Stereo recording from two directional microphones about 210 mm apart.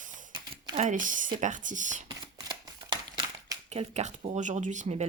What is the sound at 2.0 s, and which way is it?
Shuffling cards, 20° right (ahead or behind).